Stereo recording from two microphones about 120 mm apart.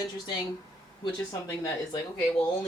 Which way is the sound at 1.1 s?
35° left (ahead or behind).